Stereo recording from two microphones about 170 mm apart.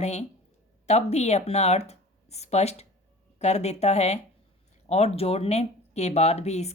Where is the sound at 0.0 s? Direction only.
40° left (ahead or behind).